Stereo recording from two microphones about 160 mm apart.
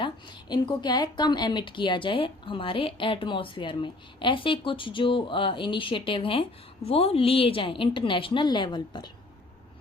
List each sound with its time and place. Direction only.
0.0 s a woman's voice: 30° left (ahead or behind)